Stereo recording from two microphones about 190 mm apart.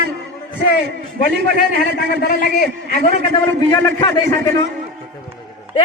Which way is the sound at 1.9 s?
55° left (ahead or behind).